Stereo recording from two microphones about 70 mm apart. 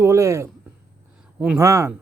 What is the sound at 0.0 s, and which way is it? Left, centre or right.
Speech, right.